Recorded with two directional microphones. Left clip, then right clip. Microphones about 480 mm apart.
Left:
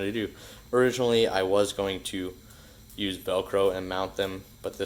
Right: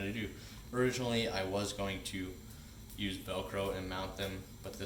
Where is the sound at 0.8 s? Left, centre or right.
Centre.